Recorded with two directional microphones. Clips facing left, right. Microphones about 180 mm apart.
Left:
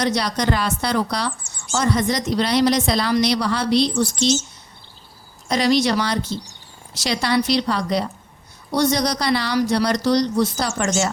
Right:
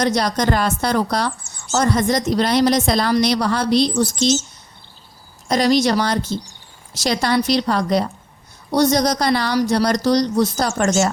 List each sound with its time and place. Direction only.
0.0 s a woman's voice: 45° right (ahead or behind)
5.5 s a woman's voice: 45° right (ahead or behind)